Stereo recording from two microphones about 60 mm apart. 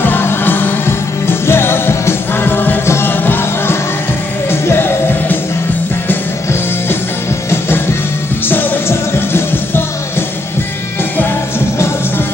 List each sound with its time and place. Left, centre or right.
0.0 s music: left
8.5 s music: left